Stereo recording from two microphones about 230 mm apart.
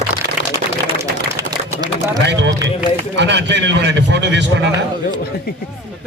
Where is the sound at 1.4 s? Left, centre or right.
Centre.